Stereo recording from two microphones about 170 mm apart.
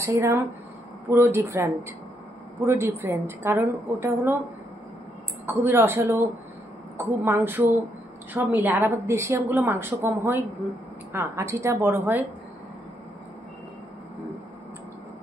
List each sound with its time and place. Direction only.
0.0 s a woman's voice: 15° right (ahead or behind)
5.5 s a woman's voice: 15° right (ahead or behind)